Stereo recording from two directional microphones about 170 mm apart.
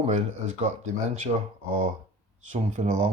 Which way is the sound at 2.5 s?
45° right (ahead or behind).